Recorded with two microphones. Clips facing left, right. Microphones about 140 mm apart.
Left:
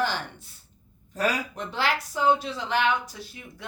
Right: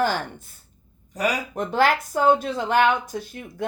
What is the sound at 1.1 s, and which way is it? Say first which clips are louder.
Speech: right 2 dB; 15° right (ahead or behind).